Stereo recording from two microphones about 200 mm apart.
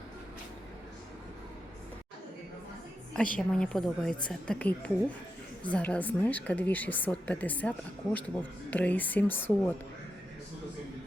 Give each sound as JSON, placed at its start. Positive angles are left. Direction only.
{"t": 3.3, "sound": "a woman's voice", "side_deg": 5}